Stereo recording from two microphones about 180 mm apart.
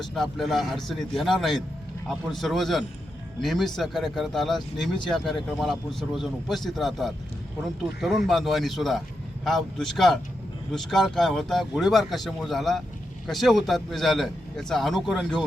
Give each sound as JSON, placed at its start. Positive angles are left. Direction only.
{"t": 0.1, "sound": "a man's voice", "side_deg": 0}